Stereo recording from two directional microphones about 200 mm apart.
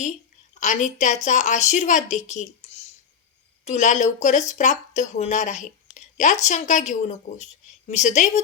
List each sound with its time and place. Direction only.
0.6 s speech: 35° left (ahead or behind)